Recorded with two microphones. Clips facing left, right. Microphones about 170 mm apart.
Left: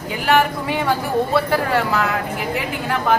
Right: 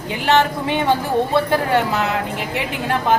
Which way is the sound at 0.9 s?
20° right (ahead or behind).